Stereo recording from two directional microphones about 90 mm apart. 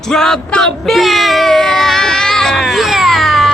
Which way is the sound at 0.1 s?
5° left (ahead or behind).